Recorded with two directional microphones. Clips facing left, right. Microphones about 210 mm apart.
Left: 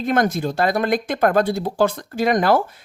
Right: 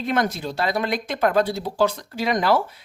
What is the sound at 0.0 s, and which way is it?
Speech, 50° left (ahead or behind).